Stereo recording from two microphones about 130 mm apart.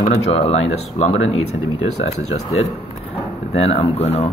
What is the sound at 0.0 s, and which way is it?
Speech, 50° left (ahead or behind).